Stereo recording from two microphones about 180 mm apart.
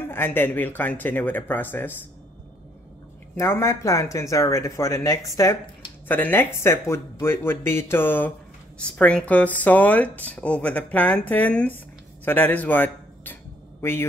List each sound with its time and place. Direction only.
0.1 s speech: 10° left (ahead or behind)
3.3 s speech: 15° left (ahead or behind)
12.3 s a sound: 10° left (ahead or behind)